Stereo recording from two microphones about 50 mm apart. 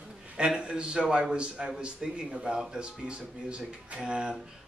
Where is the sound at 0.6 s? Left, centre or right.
Centre.